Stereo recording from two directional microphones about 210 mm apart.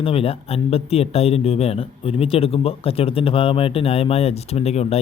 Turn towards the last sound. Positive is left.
turn(degrees=30)  # may be behind; listen again after turning